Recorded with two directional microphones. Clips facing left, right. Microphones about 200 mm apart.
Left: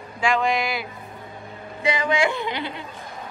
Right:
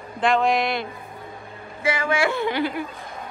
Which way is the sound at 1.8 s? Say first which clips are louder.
Left 1 dB; 15° left (ahead or behind).